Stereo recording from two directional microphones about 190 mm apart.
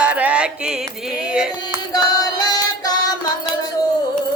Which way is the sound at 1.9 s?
20° left (ahead or behind).